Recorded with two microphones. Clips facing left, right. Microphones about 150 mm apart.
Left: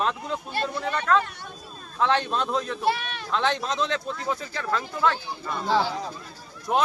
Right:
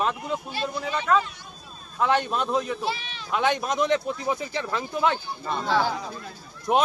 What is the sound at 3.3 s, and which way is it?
Speech, 10° right (ahead or behind).